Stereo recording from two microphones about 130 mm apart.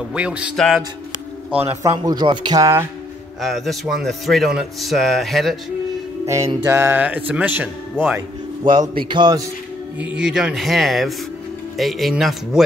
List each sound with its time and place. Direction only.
0.1 s speech: 10° right (ahead or behind)
0.6 s a man's voice: centre (ahead or behind)
1.5 s speech: 15° right (ahead or behind)
3.3 s a man's voice: centre (ahead or behind)
6.2 s music: 25° right (ahead or behind)
6.6 s speech: 15° right (ahead or behind)
8.8 s a man's voice: 35° right (ahead or behind)
9.9 s a man's voice: 10° right (ahead or behind)